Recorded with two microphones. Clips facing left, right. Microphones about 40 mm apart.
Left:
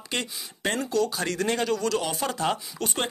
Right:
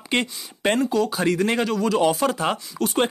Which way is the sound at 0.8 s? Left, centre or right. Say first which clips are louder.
Right 5 dB; centre.